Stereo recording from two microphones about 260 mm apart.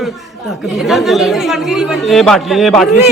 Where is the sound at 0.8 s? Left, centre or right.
Centre.